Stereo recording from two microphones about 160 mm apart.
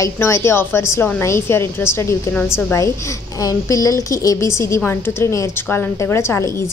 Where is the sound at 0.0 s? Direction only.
15° left (ahead or behind).